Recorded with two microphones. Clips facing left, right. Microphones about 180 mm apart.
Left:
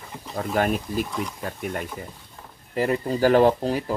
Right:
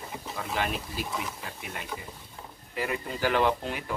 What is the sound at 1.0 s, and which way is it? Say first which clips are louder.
Speech: left 4 dB; 5° right (ahead or behind).